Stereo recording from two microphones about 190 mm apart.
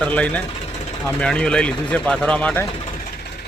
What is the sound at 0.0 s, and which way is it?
Speech, 5° left (ahead or behind).